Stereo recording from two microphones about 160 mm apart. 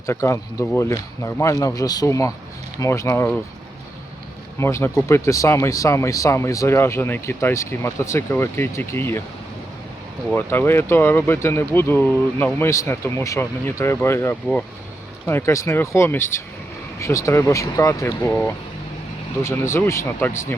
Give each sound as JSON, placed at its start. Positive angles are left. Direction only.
{"t": 0.0, "sound": "speech", "side_deg": 15}
{"t": 4.6, "sound": "speech", "side_deg": 15}
{"t": 10.3, "sound": "speech", "side_deg": 15}
{"t": 19.4, "sound": "speech", "side_deg": 15}